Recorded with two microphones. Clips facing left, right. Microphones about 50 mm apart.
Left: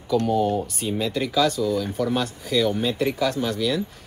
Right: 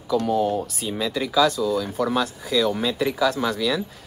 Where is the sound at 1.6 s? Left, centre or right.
Centre.